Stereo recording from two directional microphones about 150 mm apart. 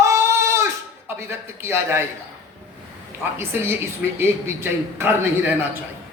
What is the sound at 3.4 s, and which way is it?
A man's voice, 15° right (ahead or behind).